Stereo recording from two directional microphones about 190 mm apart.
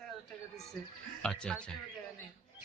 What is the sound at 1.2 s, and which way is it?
Speech, 5° left (ahead or behind).